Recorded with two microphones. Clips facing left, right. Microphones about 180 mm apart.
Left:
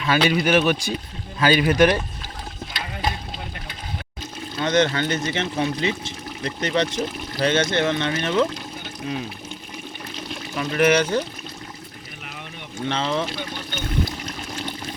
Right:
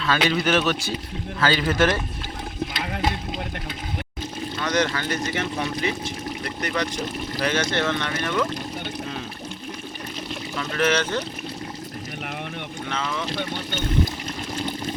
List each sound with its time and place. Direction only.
0.0 s a man's voice: 10° left (ahead or behind)
4.6 s speech: 25° left (ahead or behind)
10.5 s a man's voice: 15° left (ahead or behind)
12.9 s speech: 30° left (ahead or behind)